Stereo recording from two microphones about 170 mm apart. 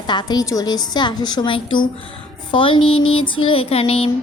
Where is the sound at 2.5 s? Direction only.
30° left (ahead or behind).